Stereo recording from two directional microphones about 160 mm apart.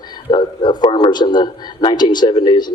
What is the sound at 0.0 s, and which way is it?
A man's voice, 25° left (ahead or behind).